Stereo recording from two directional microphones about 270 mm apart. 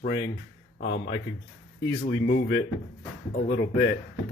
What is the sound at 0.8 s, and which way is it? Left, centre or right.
Speech, left.